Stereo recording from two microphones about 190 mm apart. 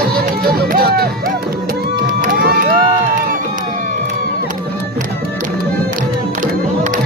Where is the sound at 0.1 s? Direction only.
55° right (ahead or behind).